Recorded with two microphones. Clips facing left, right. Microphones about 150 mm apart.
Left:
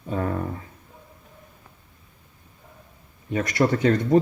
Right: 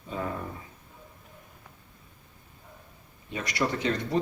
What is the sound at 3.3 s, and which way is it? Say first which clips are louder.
Speech: left 8 dB; 50° left (ahead or behind).